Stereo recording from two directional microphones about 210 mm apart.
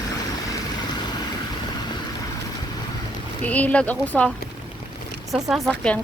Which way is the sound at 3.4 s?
5° left (ahead or behind).